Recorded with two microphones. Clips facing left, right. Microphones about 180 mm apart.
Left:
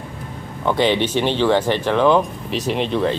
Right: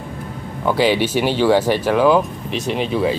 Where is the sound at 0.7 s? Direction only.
5° right (ahead or behind).